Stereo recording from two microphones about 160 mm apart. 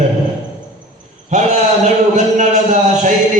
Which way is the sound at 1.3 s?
45° right (ahead or behind).